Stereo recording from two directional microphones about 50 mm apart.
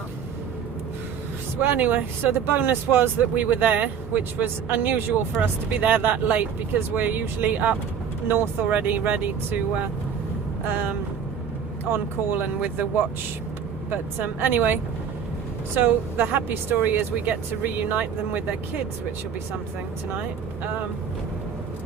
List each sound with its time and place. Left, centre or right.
1.6 s speech: right
11.9 s speech: right
13.9 s speech: right